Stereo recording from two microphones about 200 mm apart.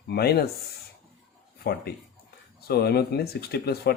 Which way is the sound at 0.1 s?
55° left (ahead or behind).